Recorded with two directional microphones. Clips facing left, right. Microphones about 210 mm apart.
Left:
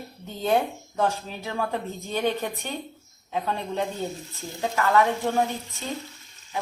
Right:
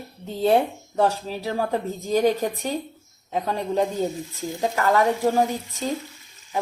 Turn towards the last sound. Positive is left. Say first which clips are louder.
# right 5 dB
turn(degrees=-40)  # may be behind; listen again after turning